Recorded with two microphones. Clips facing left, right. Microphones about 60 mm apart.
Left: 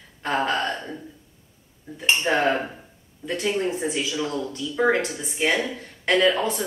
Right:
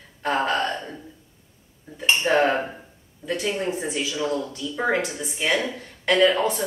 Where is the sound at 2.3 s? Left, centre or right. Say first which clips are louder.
Right 3 dB; centre.